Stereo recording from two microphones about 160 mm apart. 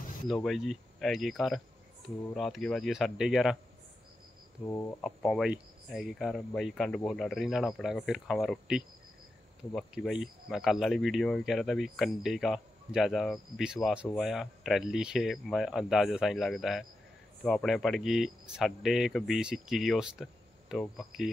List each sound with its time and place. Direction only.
0.3 s speech: centre (ahead or behind)
4.6 s speech: 15° left (ahead or behind)
5.0 s speech: centre (ahead or behind)